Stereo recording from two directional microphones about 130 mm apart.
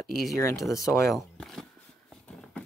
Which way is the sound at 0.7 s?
25° left (ahead or behind).